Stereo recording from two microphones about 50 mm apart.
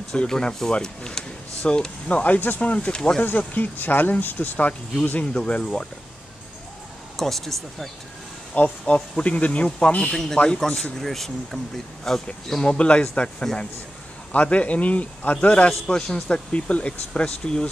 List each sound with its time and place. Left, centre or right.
0.1 s speech: centre; by 2.6 s left
2.8 s speech: centre
3.3 s speech: left
5.2 s speech: left
7.2 s speech: centre
8.5 s speech: left
10.1 s speech: centre
12.6 s speech: left